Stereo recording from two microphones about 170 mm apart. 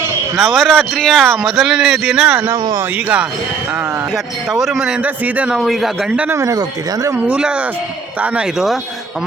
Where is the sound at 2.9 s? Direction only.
5° right (ahead or behind).